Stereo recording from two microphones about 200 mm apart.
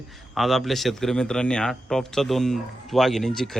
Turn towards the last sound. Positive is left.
turn(degrees=0)  # may be behind; listen again after turning